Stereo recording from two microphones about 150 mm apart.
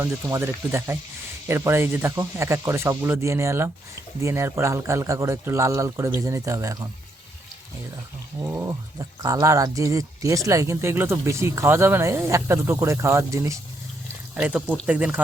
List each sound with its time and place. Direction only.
0.0 s speech: 15° right (ahead or behind)
8.4 s speech: 15° right (ahead or behind)
14.3 s speech: 10° right (ahead or behind)